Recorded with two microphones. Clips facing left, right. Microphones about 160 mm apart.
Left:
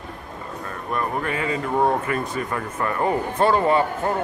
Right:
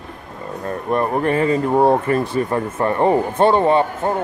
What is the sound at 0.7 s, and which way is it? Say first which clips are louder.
Speech: right 7 dB; 35° right (ahead or behind).